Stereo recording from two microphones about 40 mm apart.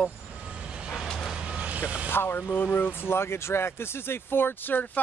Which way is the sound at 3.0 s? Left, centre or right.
Left.